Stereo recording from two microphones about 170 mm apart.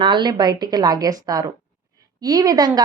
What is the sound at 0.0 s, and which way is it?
A woman's voice, 25° right (ahead or behind).